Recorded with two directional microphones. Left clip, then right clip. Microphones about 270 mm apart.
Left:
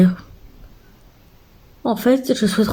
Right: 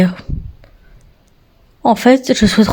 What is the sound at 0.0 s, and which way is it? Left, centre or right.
Speech, right.